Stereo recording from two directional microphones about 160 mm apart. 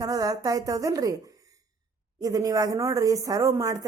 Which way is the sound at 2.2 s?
25° right (ahead or behind).